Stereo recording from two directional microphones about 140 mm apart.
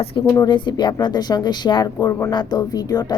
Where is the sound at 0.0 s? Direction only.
40° left (ahead or behind).